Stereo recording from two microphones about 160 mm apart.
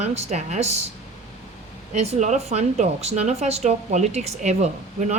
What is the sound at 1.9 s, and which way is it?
A woman's voice, 45° right (ahead or behind).